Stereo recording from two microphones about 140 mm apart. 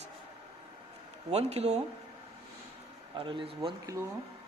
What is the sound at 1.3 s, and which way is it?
Speech, 50° right (ahead or behind).